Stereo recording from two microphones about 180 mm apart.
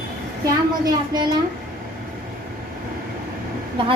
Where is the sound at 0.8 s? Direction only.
25° right (ahead or behind).